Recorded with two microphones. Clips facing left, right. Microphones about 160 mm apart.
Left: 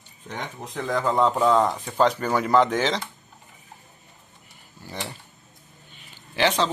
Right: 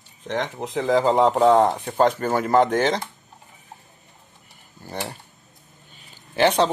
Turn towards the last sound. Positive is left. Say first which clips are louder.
# right 4 dB
turn(degrees=-50)  # may be behind; listen again after turning